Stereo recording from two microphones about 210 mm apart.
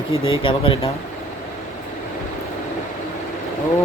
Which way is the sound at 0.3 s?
25° left (ahead or behind).